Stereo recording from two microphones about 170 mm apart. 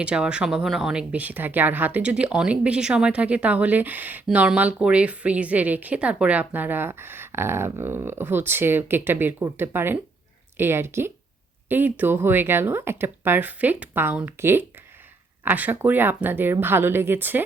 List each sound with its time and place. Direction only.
0.0 s speech: 5° right (ahead or behind)